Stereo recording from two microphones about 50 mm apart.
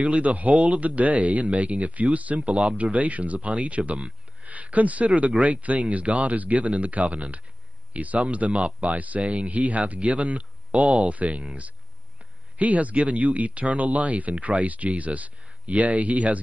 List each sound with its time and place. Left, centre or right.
0.0 s speech: right
8.9 s speech: right
12.5 s speech: right